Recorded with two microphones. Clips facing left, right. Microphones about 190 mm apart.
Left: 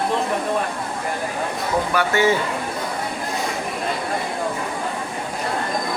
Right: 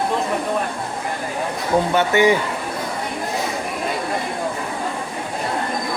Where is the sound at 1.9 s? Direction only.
20° right (ahead or behind).